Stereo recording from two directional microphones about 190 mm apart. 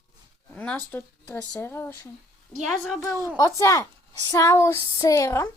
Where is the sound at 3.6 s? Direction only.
15° left (ahead or behind).